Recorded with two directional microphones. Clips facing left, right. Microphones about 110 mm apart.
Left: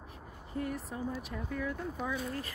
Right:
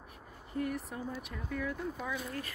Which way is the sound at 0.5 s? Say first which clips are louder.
Right 1 dB; 30° left (ahead or behind).